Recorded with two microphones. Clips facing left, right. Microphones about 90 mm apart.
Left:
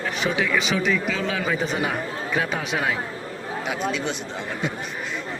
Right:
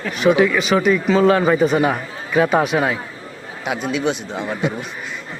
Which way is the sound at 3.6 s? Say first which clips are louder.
Right 6 dB; 65° right (ahead or behind).